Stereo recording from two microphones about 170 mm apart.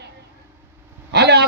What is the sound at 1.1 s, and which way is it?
Speech, 75° right (ahead or behind).